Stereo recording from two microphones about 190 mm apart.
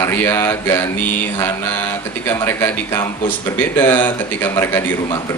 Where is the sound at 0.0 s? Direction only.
15° left (ahead or behind).